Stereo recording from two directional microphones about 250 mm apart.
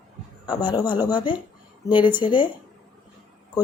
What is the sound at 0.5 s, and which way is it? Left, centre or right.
A woman's voice, centre.